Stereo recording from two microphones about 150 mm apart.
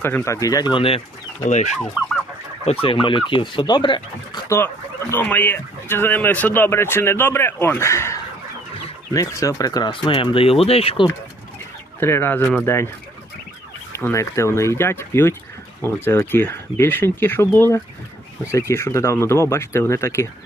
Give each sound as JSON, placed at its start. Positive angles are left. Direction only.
{"t": 0.0, "sound": "speech", "side_deg": 15}
{"t": 1.5, "sound": "fowl", "side_deg": 50}
{"t": 2.6, "sound": "speech", "side_deg": 40}
{"t": 4.4, "sound": "speech", "side_deg": 15}
{"t": 11.9, "sound": "speech", "side_deg": 15}
{"t": 13.9, "sound": "speech", "side_deg": 20}